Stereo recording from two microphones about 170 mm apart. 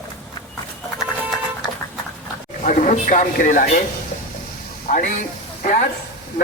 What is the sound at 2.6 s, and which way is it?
Speech, 45° left (ahead or behind).